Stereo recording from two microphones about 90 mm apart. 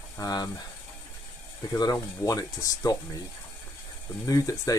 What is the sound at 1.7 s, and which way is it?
Speech, 45° left (ahead or behind).